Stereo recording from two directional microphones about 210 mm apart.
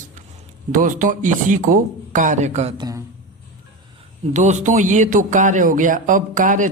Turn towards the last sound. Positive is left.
turn(degrees=-40)  # may be behind; listen again after turning